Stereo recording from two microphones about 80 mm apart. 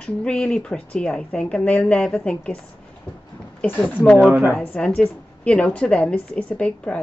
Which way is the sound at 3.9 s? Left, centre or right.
Left.